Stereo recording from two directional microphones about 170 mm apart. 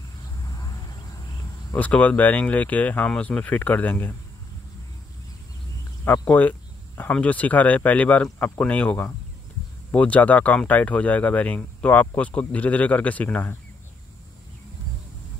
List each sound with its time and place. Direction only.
1.7 s speech: 10° left (ahead or behind)
6.0 s speech: 10° left (ahead or behind)